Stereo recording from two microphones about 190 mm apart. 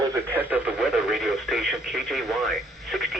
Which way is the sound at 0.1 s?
10° right (ahead or behind).